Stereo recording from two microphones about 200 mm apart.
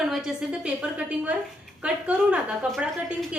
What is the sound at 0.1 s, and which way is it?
A woman's voice, 5° right (ahead or behind).